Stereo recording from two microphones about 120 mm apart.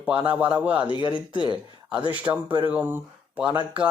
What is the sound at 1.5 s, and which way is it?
Speech, 35° right (ahead or behind).